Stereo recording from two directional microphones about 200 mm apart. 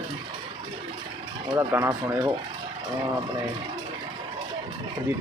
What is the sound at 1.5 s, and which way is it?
Speech, 15° right (ahead or behind).